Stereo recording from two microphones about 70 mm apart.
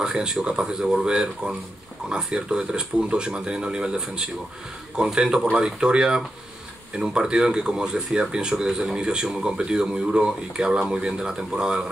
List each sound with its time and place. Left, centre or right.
0.0 s speech: centre